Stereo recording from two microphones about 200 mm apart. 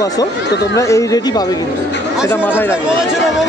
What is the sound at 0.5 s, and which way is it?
Speech, 60° left (ahead or behind).